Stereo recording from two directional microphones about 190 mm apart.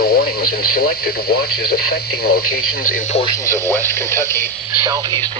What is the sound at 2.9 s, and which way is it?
Speech, 40° left (ahead or behind).